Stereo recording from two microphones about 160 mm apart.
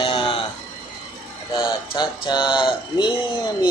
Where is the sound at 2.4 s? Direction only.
5° right (ahead or behind).